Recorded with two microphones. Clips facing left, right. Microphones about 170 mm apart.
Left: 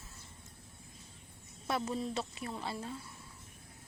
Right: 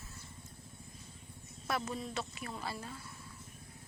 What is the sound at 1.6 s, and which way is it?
A woman's voice, 25° left (ahead or behind).